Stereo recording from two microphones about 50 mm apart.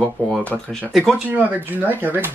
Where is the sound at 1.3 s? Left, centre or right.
Right.